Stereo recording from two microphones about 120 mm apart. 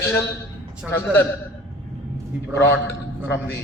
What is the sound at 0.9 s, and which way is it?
Speech, 15° left (ahead or behind).